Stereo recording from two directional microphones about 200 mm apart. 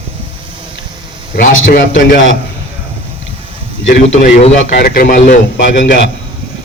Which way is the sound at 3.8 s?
35° left (ahead or behind).